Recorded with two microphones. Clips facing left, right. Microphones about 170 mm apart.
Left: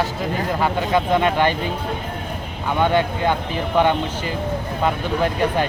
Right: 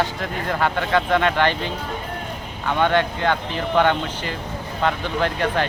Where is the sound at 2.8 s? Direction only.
10° left (ahead or behind).